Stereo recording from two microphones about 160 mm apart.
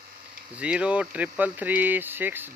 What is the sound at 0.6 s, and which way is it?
Speech, 5° right (ahead or behind).